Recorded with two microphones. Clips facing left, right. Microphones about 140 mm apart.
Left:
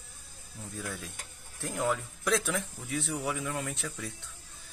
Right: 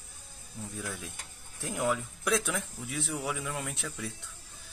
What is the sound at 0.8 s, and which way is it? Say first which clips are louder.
Speech: even; centre (ahead or behind).